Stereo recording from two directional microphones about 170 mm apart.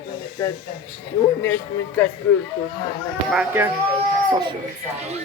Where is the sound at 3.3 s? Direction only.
10° right (ahead or behind).